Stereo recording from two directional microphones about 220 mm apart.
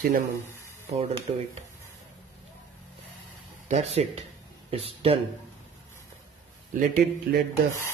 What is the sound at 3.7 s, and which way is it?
Speech, 30° right (ahead or behind).